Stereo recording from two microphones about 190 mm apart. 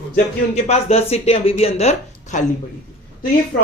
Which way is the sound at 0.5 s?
35° left (ahead or behind).